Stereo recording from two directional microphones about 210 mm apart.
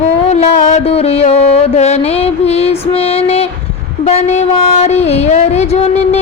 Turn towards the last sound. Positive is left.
turn(degrees=30)  # may be behind; listen again after turning